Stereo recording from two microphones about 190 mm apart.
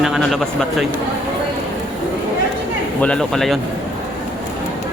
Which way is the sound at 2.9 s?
5° left (ahead or behind).